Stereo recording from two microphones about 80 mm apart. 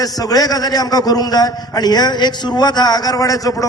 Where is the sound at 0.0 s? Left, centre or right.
Left.